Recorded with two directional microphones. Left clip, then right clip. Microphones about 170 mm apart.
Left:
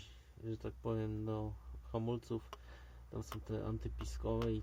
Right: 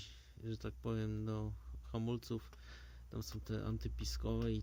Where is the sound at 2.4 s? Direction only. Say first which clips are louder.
Left 3 dB; 35° right (ahead or behind).